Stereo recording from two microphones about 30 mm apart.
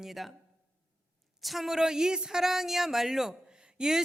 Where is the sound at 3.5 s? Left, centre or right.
Right.